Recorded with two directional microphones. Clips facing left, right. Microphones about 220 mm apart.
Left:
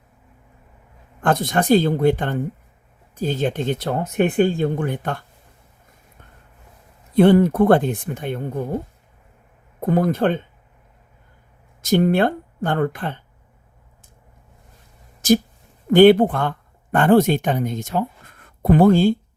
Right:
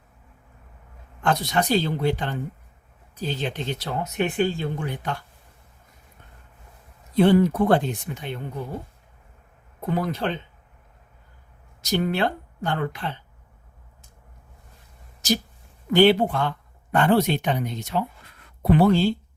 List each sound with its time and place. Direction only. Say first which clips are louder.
1.2 s speech: left 4 dB; 50° left (ahead or behind)
7.1 s speech: left 4 dB; 55° left (ahead or behind)
9.8 s speech: left 7 dB; 50° left (ahead or behind)
11.8 s speech: left 7 dB; 50° left (ahead or behind)
15.2 s speech: left 8 dB; 50° left (ahead or behind)